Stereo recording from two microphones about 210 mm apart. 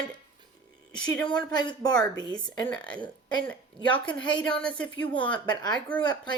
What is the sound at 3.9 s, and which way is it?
Speech, 20° left (ahead or behind).